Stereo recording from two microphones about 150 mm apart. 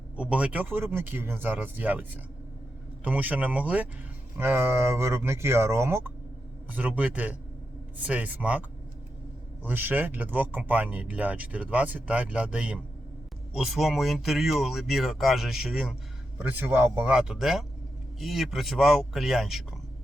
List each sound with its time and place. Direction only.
0.2 s speech: 10° right (ahead or behind)
9.6 s speech: 10° right (ahead or behind)